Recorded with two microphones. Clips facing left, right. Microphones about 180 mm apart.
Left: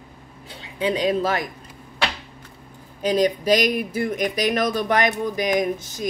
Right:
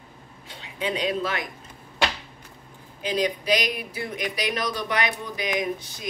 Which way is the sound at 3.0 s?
45° left (ahead or behind).